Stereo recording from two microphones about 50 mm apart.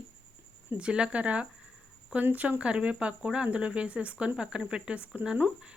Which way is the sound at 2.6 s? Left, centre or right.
Right.